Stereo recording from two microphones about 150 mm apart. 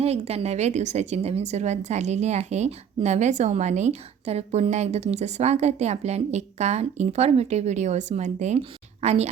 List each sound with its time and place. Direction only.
0.0 s a woman's voice: 45° right (ahead or behind)